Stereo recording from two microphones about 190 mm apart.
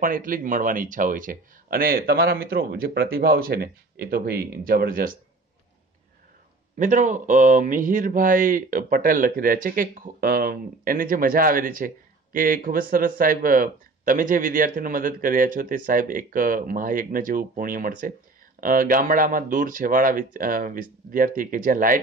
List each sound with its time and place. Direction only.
0.0 s speech: 45° right (ahead or behind)
6.8 s speech: 40° right (ahead or behind)